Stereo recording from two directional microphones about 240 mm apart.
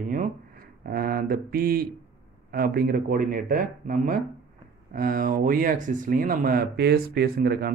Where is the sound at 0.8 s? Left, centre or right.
Right.